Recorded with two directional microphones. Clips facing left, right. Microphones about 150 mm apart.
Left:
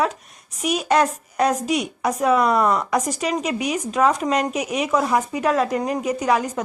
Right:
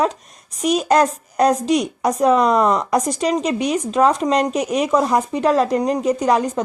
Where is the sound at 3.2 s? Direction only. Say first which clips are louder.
Right 4 dB; 35° right (ahead or behind).